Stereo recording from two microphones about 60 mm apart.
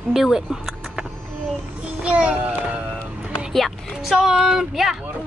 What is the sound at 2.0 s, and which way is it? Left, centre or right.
Speech, centre.